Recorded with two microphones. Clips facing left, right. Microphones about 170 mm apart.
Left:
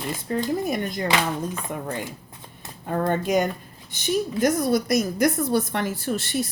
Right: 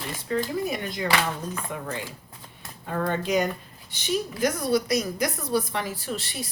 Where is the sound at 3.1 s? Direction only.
50° left (ahead or behind).